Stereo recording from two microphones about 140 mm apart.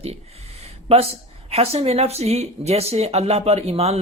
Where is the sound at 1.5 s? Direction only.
45° right (ahead or behind).